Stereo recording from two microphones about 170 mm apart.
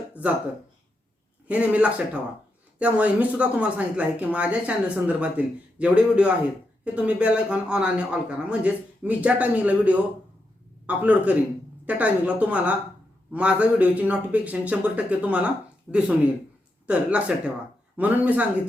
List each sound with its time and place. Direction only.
1.5 s speech: 10° right (ahead or behind)